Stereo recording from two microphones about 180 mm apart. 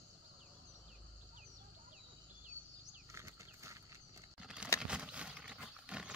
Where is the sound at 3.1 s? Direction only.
15° right (ahead or behind).